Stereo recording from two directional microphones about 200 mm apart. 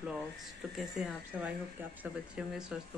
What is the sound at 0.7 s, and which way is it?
Speech, 5° right (ahead or behind).